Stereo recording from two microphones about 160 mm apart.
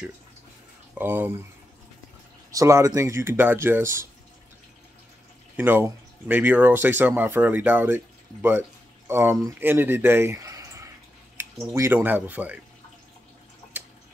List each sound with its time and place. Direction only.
0.9 s speech: 10° right (ahead or behind)
2.5 s speech: 20° right (ahead or behind)
5.6 s speech: 10° right (ahead or behind)